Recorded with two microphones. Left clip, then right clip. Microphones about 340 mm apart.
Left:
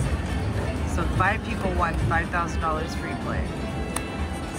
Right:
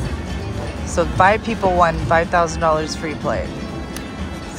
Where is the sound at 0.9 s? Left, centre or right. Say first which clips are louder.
Right 11 dB; centre.